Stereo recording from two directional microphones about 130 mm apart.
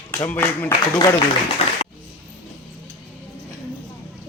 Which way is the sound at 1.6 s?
55° left (ahead or behind).